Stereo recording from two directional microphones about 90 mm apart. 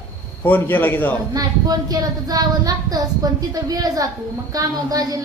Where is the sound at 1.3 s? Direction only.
45° right (ahead or behind).